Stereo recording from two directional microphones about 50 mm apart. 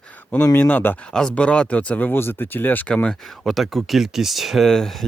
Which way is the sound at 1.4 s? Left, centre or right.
Left.